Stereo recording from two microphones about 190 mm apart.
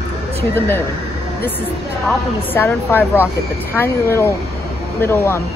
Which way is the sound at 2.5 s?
10° left (ahead or behind).